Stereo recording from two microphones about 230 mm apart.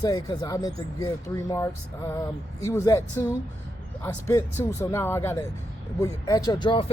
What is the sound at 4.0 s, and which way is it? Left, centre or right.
Speech, centre.